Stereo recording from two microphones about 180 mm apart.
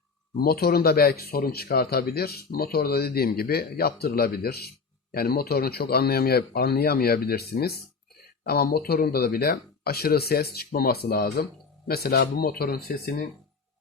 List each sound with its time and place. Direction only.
0.3 s speech: 60° left (ahead or behind)